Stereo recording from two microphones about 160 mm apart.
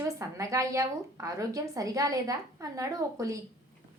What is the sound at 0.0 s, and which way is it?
A woman's voice, 20° right (ahead or behind).